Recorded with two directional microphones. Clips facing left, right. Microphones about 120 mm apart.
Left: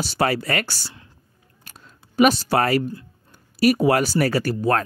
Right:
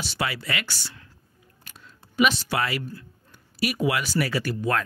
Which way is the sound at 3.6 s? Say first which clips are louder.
Left 8 dB; 40° left (ahead or behind).